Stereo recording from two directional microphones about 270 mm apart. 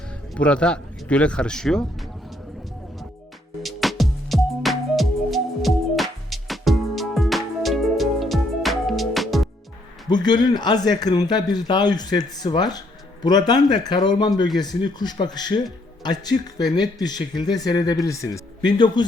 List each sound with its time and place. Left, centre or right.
0.1 s speech: centre
3.6 s music: centre
10.1 s speech: centre